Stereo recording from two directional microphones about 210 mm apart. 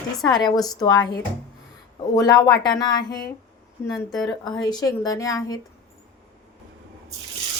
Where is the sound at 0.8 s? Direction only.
20° left (ahead or behind).